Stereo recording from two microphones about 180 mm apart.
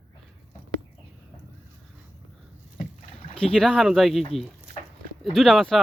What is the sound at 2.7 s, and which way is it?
Rowboat, 45° left (ahead or behind).